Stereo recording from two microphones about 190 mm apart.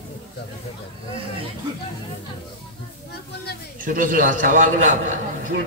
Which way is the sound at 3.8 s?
45° right (ahead or behind).